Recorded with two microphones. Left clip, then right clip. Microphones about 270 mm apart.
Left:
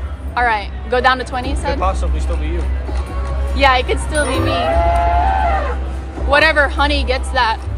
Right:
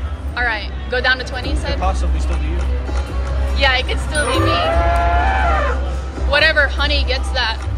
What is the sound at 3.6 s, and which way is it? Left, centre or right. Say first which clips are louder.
Speech: left 3 dB; centre.